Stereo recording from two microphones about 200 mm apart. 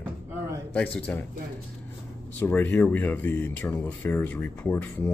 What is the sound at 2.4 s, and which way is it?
Speech, 10° left (ahead or behind).